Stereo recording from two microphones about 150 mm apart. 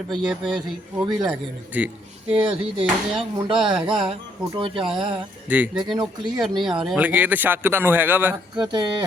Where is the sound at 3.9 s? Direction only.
35° right (ahead or behind).